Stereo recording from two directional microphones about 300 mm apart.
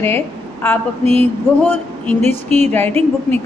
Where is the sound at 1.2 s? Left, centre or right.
Centre.